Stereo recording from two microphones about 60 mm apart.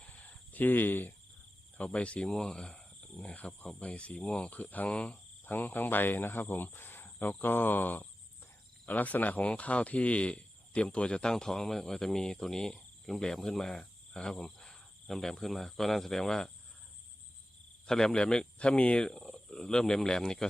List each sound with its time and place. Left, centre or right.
0.1 s a sound: left
1.8 s speech: centre
3.2 s speech: left
5.5 s speech: left; by 16.5 s centre
17.8 s speech: centre
19.0 s speech: centre